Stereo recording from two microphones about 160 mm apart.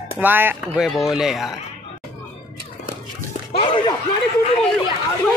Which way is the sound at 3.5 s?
35° left (ahead or behind).